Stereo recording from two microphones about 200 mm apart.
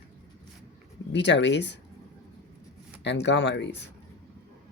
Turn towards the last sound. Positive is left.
turn(degrees=60)  # may be behind; listen again after turning